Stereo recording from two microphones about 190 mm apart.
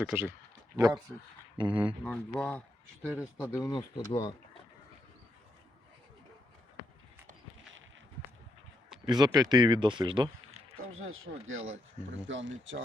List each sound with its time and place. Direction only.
0.0 s speech: 10° right (ahead or behind)
0.8 s speech: 20° right (ahead or behind)
2.0 s speech: 5° left (ahead or behind); by 4.1 s 20° left (ahead or behind)
9.0 s speech: 20° right (ahead or behind)
10.9 s speech: 90° right
12.3 s speech: 80° right